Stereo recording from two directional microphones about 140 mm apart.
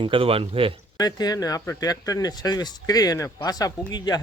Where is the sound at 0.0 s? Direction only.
40° right (ahead or behind).